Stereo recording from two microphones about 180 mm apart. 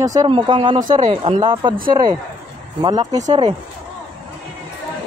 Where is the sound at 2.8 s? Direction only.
25° right (ahead or behind).